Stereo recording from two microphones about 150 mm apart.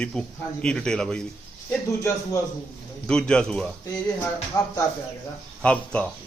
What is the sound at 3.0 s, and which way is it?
Speech, 5° left (ahead or behind).